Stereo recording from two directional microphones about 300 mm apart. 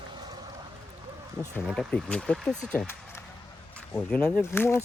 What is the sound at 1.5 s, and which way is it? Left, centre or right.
Speech, centre.